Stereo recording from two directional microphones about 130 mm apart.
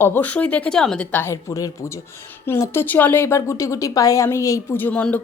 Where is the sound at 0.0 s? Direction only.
15° left (ahead or behind).